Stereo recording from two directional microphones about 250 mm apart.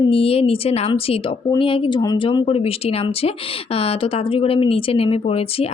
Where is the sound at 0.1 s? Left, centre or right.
Left.